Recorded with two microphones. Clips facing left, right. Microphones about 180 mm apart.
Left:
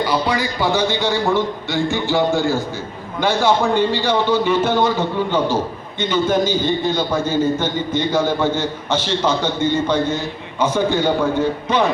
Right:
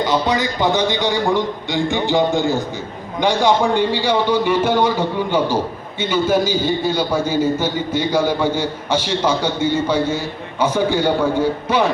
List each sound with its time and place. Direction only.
0.0 s a man's voice: 20° right (ahead or behind)